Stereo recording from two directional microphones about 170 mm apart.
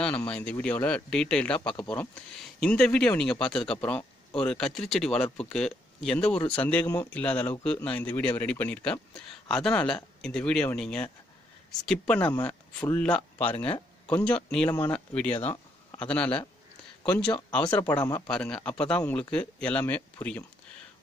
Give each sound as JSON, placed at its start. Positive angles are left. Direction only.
{"t": 0.0, "sound": "speech", "side_deg": 5}
{"t": 18.0, "sound": "a man's voice", "side_deg": 20}
{"t": 18.3, "sound": "speech", "side_deg": 5}